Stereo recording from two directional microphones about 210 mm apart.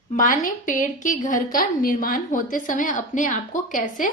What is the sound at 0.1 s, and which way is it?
A woman's voice, 40° left (ahead or behind).